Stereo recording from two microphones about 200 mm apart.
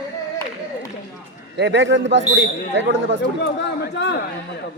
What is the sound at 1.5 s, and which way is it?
Speech, 60° right (ahead or behind).